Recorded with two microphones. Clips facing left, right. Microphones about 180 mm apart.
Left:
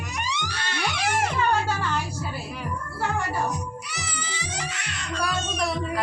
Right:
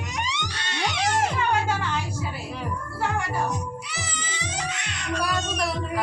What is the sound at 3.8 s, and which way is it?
Cat, 20° right (ahead or behind).